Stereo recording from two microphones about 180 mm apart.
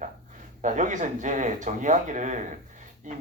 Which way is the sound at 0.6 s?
45° right (ahead or behind).